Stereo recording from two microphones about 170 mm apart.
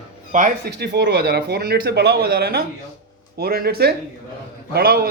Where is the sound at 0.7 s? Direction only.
80° right.